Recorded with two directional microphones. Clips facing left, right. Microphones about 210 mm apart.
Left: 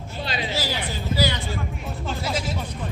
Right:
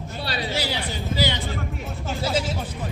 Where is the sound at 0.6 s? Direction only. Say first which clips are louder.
Even; 20° right (ahead or behind).